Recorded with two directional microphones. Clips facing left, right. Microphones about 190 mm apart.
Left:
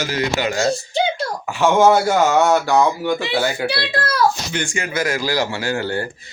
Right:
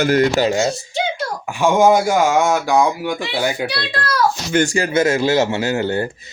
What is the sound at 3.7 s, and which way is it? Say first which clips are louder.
Speech: left 1 dB; 25° left (ahead or behind).